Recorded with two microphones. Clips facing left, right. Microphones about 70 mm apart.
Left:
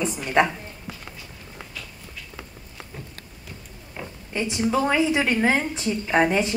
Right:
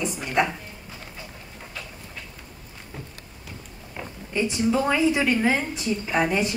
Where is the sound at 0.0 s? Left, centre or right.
Left.